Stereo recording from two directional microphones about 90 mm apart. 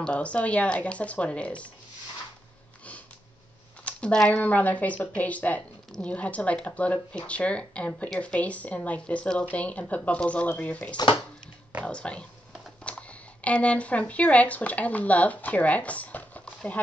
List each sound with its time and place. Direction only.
0.0 s speech: 15° left (ahead or behind)
3.8 s speech: 10° left (ahead or behind)